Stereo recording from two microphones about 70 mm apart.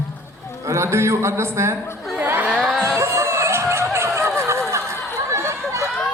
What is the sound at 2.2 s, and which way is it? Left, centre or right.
Crowd, right.